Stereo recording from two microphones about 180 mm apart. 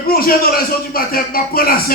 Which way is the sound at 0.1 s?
55° left (ahead or behind).